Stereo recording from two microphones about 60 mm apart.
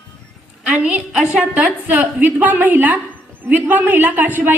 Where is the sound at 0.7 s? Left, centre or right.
Centre.